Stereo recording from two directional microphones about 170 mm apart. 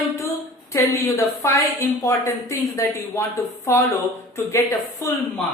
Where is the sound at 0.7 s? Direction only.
15° left (ahead or behind).